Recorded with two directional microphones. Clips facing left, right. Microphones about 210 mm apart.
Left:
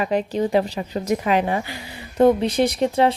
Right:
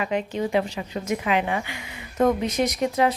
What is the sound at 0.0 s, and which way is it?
A woman's voice, 35° left (ahead or behind).